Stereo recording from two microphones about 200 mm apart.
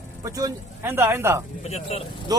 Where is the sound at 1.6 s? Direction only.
30° left (ahead or behind).